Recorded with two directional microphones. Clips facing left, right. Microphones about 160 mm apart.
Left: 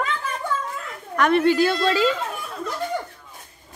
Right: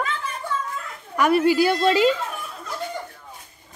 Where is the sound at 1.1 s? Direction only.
5° right (ahead or behind).